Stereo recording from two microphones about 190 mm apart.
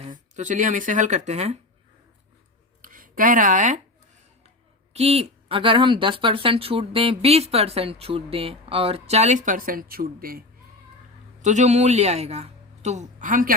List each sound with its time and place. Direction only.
0.0 s speech: 40° right (ahead or behind)
2.8 s speech: 45° right (ahead or behind)
4.9 s speech: 30° right (ahead or behind); by 10.4 s 50° right (ahead or behind)
11.4 s a man's voice: 40° right (ahead or behind)